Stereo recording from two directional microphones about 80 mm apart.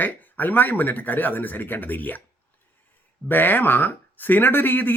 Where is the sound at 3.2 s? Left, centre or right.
Left.